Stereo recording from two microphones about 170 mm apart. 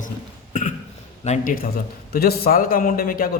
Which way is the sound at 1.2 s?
45° left (ahead or behind).